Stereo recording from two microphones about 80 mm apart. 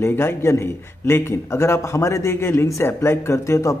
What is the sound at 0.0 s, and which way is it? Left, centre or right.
A man's voice, left.